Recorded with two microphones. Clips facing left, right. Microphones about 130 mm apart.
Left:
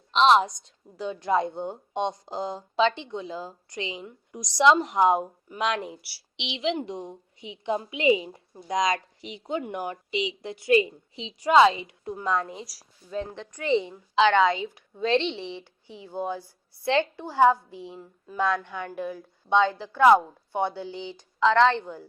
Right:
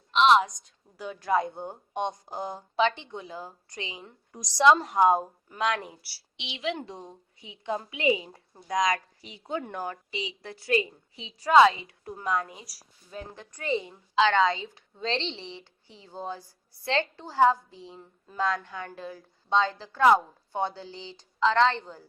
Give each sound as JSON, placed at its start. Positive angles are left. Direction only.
{"t": 0.1, "sound": "a woman's voice", "side_deg": 35}
{"t": 3.9, "sound": "speech", "side_deg": -30}
{"t": 4.4, "sound": "a woman's voice", "side_deg": 15}